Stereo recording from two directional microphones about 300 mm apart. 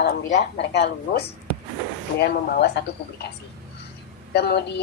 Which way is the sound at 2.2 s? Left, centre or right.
Left.